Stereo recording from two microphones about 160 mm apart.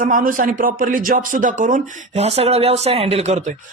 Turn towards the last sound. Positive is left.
turn(degrees=-45)  # may be behind; listen again after turning